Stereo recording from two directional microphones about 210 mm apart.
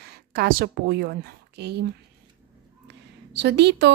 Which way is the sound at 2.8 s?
55° right (ahead or behind).